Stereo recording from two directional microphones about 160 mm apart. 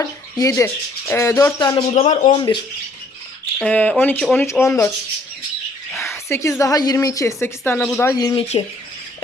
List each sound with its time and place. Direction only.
0.0 s speech: 20° left (ahead or behind)
2.0 s a man's voice: 50° left (ahead or behind)
3.6 s speech: 10° left (ahead or behind)
5.9 s a woman's voice: 15° left (ahead or behind)
8.4 s speech: 35° left (ahead or behind)